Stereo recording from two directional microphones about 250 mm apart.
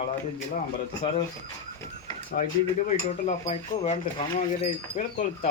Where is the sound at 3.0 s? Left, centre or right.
Left.